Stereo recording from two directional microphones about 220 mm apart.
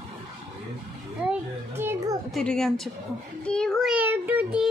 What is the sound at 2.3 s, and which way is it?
A child's voice, 5° left (ahead or behind).